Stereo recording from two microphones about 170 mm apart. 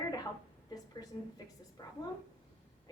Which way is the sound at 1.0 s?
25° left (ahead or behind).